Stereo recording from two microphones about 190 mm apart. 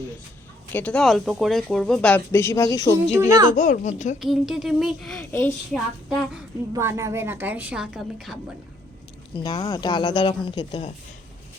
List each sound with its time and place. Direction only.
0.7 s speech: 10° left (ahead or behind)
3.1 s a woman's voice: 15° right (ahead or behind)
3.5 s speech: 40° left (ahead or behind)
4.2 s speech: centre (ahead or behind)
5.3 s a woman's voice: 15° left (ahead or behind)
6.7 s a woman's voice: 15° right (ahead or behind)
9.4 s speech: 20° left (ahead or behind)